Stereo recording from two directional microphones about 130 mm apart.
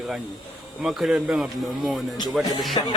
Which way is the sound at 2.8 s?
40° left (ahead or behind).